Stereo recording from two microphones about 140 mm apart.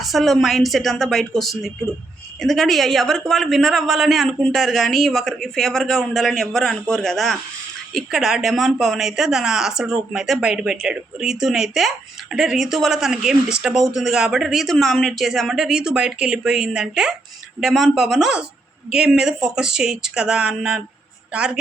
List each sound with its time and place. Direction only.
0.0 s a woman's voice: centre (ahead or behind)